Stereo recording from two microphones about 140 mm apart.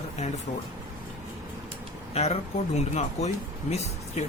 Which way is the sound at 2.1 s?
45° left (ahead or behind).